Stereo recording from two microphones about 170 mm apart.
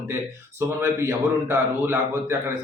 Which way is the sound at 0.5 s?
15° right (ahead or behind).